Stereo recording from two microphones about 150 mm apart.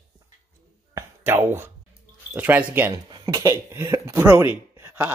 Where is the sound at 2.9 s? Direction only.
30° right (ahead or behind).